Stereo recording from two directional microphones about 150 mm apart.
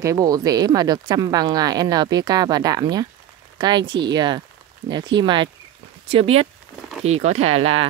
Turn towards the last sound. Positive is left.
turn(degrees=-40)  # may be behind; listen again after turning